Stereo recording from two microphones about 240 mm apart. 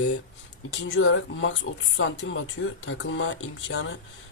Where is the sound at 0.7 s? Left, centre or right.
Left.